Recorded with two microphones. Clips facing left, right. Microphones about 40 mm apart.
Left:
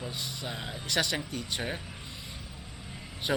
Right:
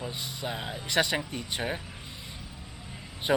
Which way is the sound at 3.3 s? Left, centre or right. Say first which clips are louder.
Right 4 dB; centre.